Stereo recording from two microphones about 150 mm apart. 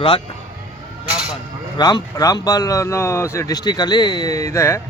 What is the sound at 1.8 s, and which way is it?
Speech, 25° left (ahead or behind).